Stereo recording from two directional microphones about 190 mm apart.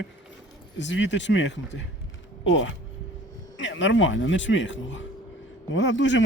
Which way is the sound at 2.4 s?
85° left.